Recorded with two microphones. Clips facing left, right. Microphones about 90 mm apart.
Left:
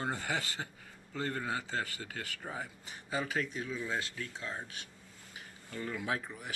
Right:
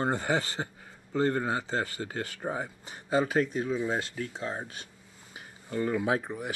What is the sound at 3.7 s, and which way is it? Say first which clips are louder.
Speech: right 7 dB; 25° right (ahead or behind).